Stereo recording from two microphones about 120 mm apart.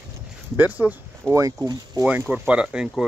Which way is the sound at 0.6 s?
15° right (ahead or behind).